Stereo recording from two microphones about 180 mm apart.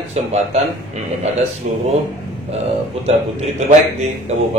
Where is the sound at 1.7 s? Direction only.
45° right (ahead or behind).